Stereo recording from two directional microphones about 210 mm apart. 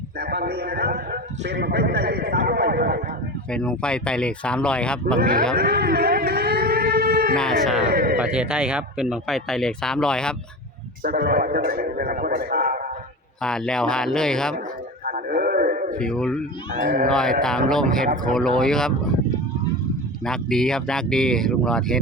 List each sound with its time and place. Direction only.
0.2 s a man's voice: 50° right (ahead or behind)
3.5 s speech: 5° left (ahead or behind)
5.5 s a sound: 45° right (ahead or behind)
7.3 s speech: centre (ahead or behind)
7.9 s a sound: 45° right (ahead or behind)
8.2 s speech: 5° right (ahead or behind)
11.0 s a man's voice: 45° right (ahead or behind)
13.4 s speech: 5° left (ahead or behind)
15.0 s a sound: 40° right (ahead or behind)
16.0 s speech: 5° left (ahead or behind)
16.7 s speech: 40° right (ahead or behind)
17.1 s speech: 5° left (ahead or behind)
20.2 s speech: 5° left (ahead or behind)